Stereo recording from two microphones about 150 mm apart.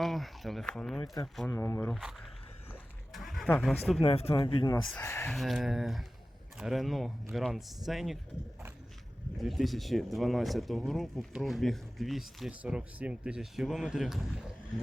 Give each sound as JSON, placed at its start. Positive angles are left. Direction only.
{"t": 0.0, "sound": "speech", "side_deg": 0}
{"t": 1.5, "sound": "speech", "side_deg": 20}
{"t": 1.9, "sound": "speech", "side_deg": 0}
{"t": 3.1, "sound": "a sound", "side_deg": 0}
{"t": 3.6, "sound": "speech", "side_deg": 0}
{"t": 4.0, "sound": "speech", "side_deg": 40}
{"t": 4.8, "sound": "speech", "side_deg": 0}
{"t": 5.0, "sound": "speech", "side_deg": 15}
{"t": 5.3, "sound": "speech", "side_deg": 0}
{"t": 9.4, "sound": "speech", "side_deg": 0}